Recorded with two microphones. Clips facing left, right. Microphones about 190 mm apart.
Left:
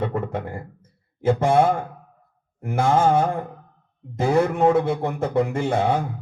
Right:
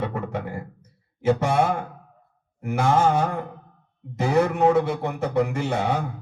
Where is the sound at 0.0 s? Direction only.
55° left (ahead or behind).